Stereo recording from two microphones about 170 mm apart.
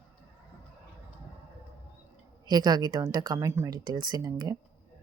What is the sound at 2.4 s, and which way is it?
Speech, 25° right (ahead or behind).